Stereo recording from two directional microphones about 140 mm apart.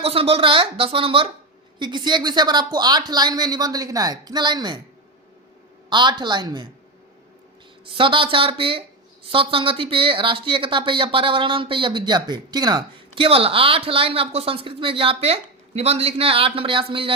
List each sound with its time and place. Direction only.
0.0 s a woman's voice: 45° right (ahead or behind)
5.9 s speech: 35° right (ahead or behind)
7.9 s speech: 35° right (ahead or behind)